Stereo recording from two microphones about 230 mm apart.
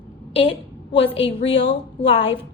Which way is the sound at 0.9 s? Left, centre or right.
Left.